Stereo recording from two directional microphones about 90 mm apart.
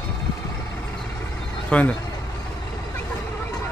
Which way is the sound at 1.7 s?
15° left (ahead or behind).